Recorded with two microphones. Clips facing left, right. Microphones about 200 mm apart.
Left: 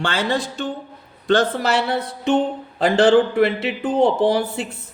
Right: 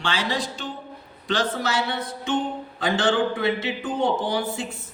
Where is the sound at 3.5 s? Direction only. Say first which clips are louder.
Left 3 dB; 65° left (ahead or behind).